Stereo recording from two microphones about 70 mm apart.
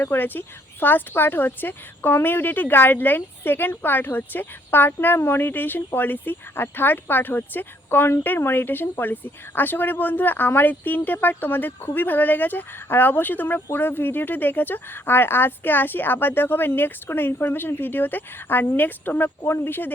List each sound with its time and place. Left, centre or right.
0.0 s speech: left